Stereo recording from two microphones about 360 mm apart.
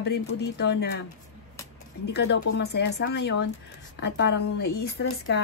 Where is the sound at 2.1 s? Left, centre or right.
Left.